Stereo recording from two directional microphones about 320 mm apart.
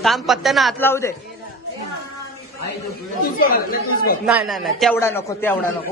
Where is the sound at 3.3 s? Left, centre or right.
Left.